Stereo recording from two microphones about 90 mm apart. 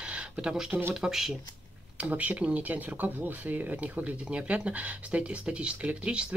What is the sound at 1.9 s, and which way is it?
Speech, 15° right (ahead or behind).